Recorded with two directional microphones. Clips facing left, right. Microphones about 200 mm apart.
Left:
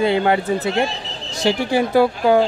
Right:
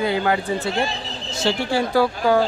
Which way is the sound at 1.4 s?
15° left (ahead or behind).